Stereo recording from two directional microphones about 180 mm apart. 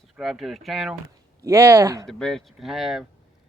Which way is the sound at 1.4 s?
15° right (ahead or behind).